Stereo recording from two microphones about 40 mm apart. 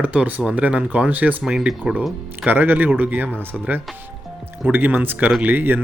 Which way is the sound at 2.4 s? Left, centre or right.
Right.